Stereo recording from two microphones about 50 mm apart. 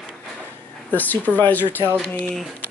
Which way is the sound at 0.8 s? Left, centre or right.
Left.